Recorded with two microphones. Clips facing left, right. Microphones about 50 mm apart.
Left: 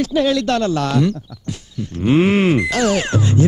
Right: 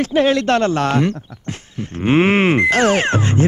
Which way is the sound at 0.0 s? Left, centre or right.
Right.